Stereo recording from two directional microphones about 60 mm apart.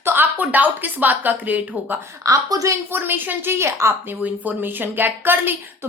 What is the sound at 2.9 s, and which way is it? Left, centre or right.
A woman's voice, right.